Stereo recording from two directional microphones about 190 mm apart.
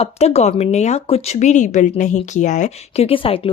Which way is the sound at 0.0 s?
35° left (ahead or behind).